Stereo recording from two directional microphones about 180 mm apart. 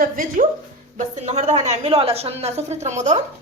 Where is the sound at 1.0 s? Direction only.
40° right (ahead or behind).